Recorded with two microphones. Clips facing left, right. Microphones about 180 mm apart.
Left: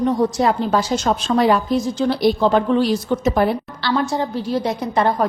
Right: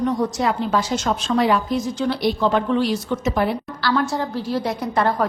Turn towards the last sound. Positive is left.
turn(degrees=20)  # may be behind; listen again after turning